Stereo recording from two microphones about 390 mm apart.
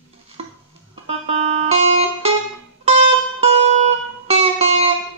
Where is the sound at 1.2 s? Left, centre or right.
Centre.